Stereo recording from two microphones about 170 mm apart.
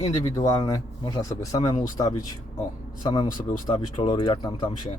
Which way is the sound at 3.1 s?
25° left (ahead or behind).